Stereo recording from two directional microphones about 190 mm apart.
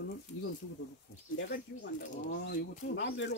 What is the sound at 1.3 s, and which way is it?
Speech, 65° left (ahead or behind).